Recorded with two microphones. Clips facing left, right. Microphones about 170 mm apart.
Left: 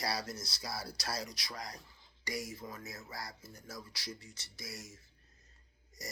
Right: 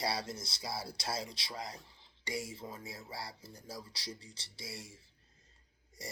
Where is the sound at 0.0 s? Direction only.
30° right (ahead or behind).